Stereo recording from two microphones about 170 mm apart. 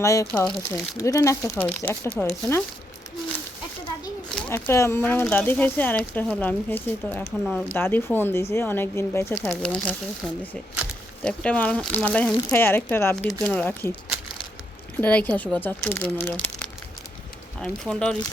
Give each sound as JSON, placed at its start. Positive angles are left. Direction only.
{"t": 0.0, "sound": "speech", "side_deg": 20}
{"t": 4.4, "sound": "speech", "side_deg": 10}
{"t": 15.0, "sound": "speech", "side_deg": 10}